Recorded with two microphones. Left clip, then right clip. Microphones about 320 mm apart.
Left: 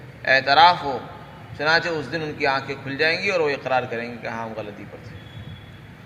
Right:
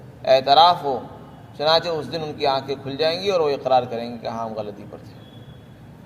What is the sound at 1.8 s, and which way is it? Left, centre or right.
Speech, centre.